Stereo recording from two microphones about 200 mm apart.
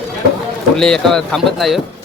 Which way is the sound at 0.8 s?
5° left (ahead or behind).